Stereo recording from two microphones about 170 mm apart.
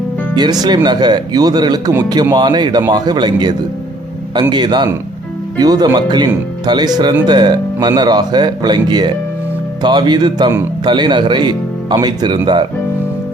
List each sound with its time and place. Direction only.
0.3 s speech: 25° right (ahead or behind)